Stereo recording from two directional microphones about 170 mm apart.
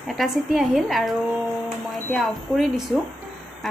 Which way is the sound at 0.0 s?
Centre (ahead or behind).